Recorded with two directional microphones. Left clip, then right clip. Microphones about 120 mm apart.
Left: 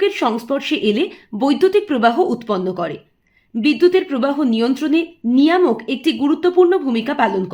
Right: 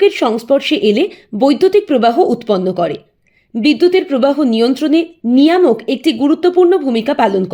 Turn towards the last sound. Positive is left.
turn(degrees=-45)  # may be behind; listen again after turning